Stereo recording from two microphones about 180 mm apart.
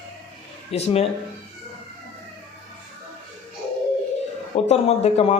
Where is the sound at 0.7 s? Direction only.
35° left (ahead or behind).